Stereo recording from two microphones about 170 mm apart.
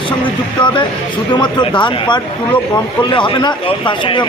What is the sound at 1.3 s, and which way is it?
Speech, 25° left (ahead or behind).